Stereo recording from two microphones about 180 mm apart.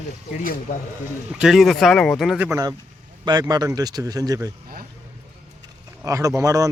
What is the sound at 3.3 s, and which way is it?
Speech, 20° right (ahead or behind).